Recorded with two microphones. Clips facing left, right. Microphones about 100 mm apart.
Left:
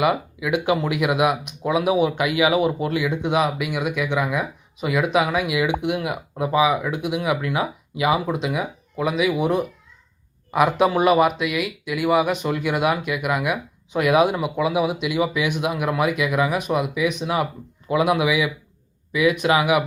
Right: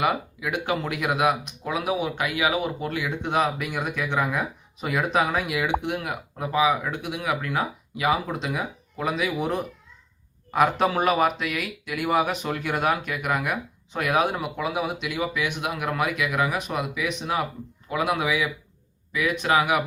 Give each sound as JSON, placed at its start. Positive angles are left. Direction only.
{"t": 0.0, "sound": "speech", "side_deg": 10}